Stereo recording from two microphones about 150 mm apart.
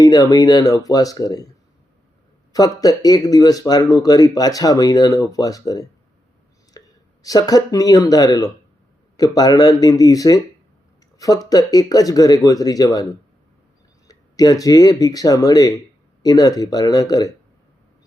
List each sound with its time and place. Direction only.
0.0 s speech: 25° left (ahead or behind)
14.1 s speech: 25° left (ahead or behind)